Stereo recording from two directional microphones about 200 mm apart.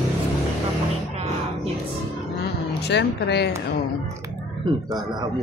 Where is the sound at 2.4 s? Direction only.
55° left (ahead or behind).